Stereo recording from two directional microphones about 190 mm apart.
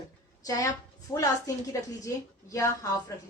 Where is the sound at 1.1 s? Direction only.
15° left (ahead or behind).